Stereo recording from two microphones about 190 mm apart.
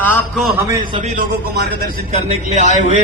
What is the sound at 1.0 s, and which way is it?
Speech, 40° right (ahead or behind).